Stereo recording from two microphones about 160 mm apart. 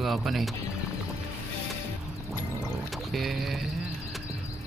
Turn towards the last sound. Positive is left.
turn(degrees=0)  # may be behind; listen again after turning